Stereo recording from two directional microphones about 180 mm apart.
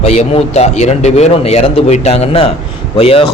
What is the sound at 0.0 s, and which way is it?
A man's voice, 35° left (ahead or behind).